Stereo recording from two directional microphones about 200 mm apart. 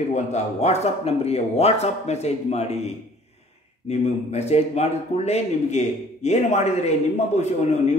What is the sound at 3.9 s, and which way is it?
A man's voice, 30° left (ahead or behind).